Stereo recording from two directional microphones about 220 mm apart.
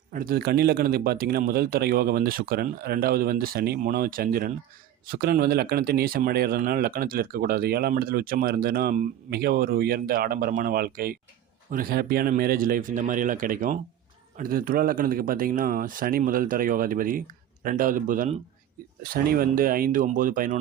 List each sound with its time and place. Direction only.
0.1 s speech: 40° right (ahead or behind)